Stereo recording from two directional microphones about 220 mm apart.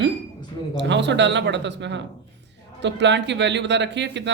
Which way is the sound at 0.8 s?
55° right (ahead or behind).